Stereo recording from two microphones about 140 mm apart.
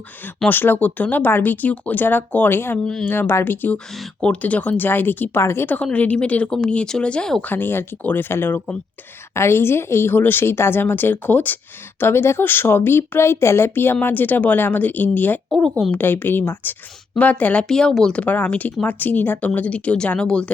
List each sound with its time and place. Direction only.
0.3 s speech: 10° left (ahead or behind)
3.1 s speech: 15° left (ahead or behind)